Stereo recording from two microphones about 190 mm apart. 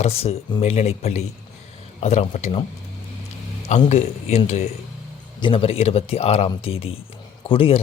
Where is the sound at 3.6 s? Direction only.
35° left (ahead or behind).